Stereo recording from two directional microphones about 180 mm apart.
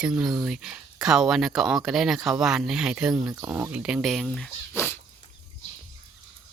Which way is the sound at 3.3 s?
15° right (ahead or behind).